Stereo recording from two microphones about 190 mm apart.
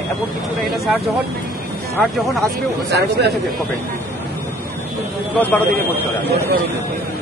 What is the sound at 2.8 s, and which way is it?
Speech, 60° right (ahead or behind).